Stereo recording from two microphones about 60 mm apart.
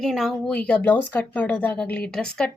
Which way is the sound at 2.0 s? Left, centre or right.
Centre.